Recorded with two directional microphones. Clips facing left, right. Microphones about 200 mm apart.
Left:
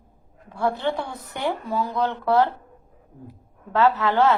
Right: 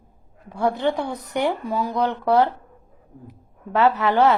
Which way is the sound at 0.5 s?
15° right (ahead or behind).